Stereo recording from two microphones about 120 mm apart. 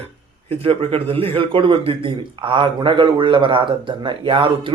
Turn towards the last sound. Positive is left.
turn(degrees=-45)  # may be behind; listen again after turning